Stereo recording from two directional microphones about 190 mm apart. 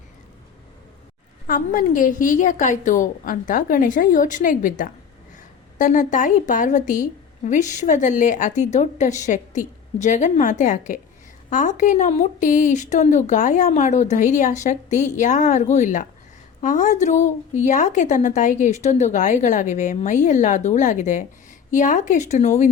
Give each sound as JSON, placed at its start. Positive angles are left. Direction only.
{"t": 1.5, "sound": "a woman's voice", "side_deg": 45}